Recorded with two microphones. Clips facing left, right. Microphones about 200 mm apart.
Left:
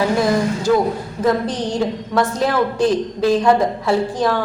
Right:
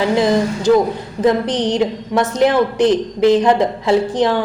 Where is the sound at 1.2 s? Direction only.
20° right (ahead or behind).